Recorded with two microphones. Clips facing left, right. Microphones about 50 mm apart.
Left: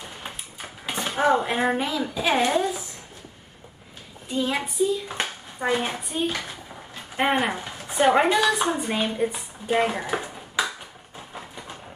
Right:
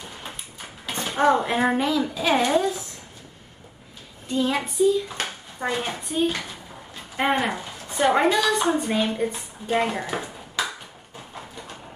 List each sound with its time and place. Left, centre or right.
0.8 s a sound: centre
1.1 s speech: centre
4.3 s speech: centre
5.0 s a woman's voice: centre
8.5 s speech: centre
10.0 s a sound: centre